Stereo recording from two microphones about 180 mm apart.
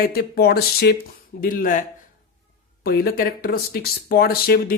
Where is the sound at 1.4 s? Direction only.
50° left (ahead or behind).